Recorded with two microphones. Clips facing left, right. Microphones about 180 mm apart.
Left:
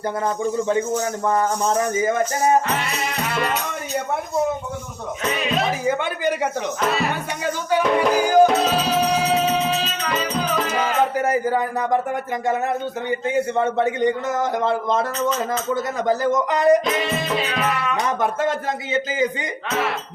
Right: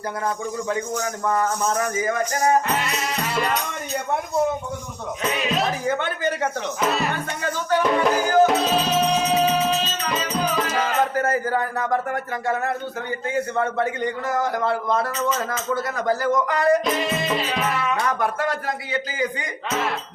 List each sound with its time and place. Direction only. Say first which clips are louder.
0.4 s a man's voice: left 5 dB; 25° left (ahead or behind)
2.9 s music: even; centre (ahead or behind)
5.4 s music: left 1 dB; centre (ahead or behind)
5.8 s music: left 2 dB; 10° left (ahead or behind)
10.8 s a sound: left 2 dB; 15° left (ahead or behind)
12.5 s a man's voice: left 3 dB; 20° left (ahead or behind)
16.8 s music: even; centre (ahead or behind)
17.9 s a man's voice: left 1 dB; 20° left (ahead or behind)